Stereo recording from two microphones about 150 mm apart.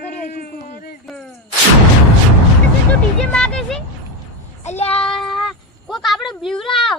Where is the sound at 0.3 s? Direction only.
90° left.